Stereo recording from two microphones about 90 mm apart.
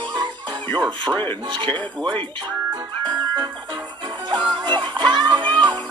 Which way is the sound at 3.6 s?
60° right (ahead or behind).